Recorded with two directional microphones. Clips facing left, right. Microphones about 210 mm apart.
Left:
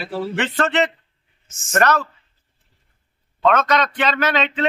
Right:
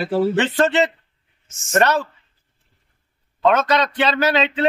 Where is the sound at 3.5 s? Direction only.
25° right (ahead or behind).